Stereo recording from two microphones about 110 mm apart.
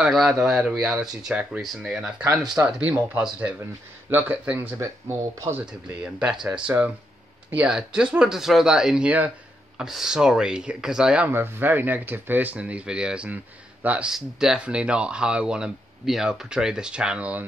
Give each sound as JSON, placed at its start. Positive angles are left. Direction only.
{"t": 0.0, "sound": "speech", "side_deg": -5}
{"t": 6.0, "sound": "speech", "side_deg": -5}